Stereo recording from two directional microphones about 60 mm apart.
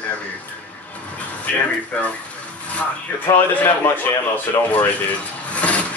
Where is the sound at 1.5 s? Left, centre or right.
Left.